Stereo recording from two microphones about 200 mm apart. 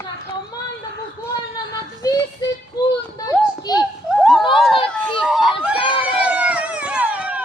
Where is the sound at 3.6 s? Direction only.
20° left (ahead or behind).